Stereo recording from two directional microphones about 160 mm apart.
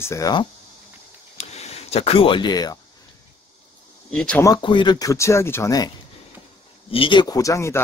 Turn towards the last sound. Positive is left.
turn(degrees=20)  # may be behind; listen again after turning